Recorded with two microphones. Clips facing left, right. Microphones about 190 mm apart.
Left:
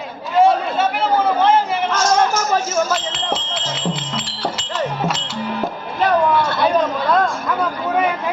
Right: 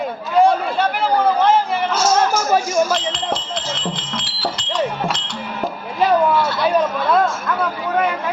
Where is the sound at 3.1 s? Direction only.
5° left (ahead or behind).